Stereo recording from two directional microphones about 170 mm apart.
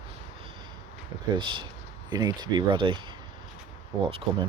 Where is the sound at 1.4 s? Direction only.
30° right (ahead or behind).